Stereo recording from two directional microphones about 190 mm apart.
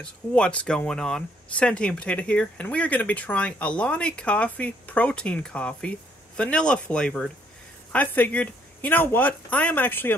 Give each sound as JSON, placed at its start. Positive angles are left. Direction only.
{"t": 0.0, "sound": "speech", "side_deg": 5}